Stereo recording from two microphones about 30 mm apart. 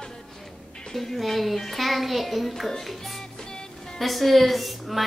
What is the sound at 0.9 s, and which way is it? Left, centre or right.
A woman's voice, centre.